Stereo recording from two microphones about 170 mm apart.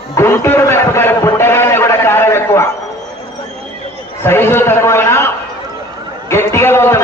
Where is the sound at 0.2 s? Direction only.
15° left (ahead or behind).